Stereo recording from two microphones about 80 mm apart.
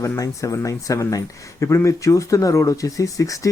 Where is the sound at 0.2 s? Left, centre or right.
Left.